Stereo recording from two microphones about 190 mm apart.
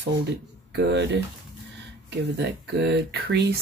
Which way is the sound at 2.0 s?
65° right (ahead or behind).